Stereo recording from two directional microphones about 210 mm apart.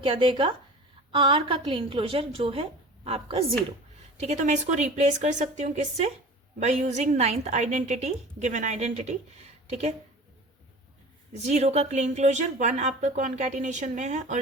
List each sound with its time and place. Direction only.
0.0 s a woman's voice: 25° right (ahead or behind)
11.3 s speech: 30° right (ahead or behind)